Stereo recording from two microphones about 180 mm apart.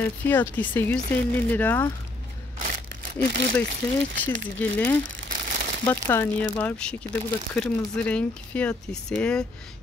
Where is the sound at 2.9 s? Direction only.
65° right (ahead or behind).